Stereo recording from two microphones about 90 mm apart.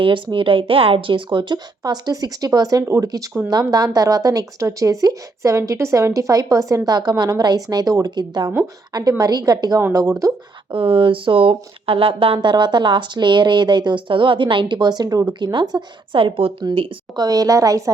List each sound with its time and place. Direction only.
0.0 s a woman's voice: 70° right (ahead or behind); by 10.3 s 40° right (ahead or behind)
10.7 s a woman's voice: 70° right (ahead or behind); by 15.8 s 50° right (ahead or behind)
16.1 s a woman's voice: 90° right
17.2 s a woman's voice: 40° right (ahead or behind)